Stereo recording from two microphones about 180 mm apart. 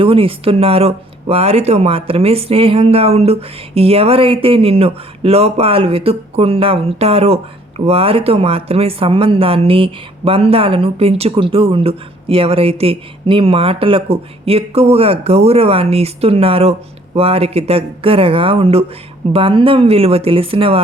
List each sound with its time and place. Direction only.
0.0 s speech: 30° right (ahead or behind)